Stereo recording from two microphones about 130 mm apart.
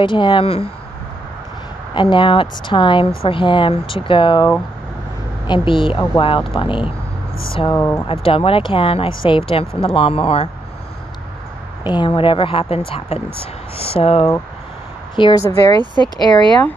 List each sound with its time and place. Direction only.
0.0 s speech: 35° left (ahead or behind)
2.0 s speech: 40° left (ahead or behind)
5.5 s speech: 40° left (ahead or behind)
7.7 s speech: 20° left (ahead or behind)
8.1 s speech: 45° left (ahead or behind)
11.8 s speech: 35° left (ahead or behind); by 14.3 s 50° left (ahead or behind)
15.1 s speech: 35° left (ahead or behind)
15.8 s speech: 35° right (ahead or behind)
16.2 s speech: 35° left (ahead or behind)